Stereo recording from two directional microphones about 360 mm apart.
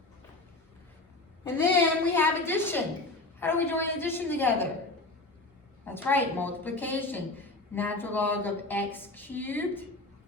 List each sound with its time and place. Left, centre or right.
1.6 s a sound: centre
3.4 s a woman's voice: centre
5.8 s a woman's voice: centre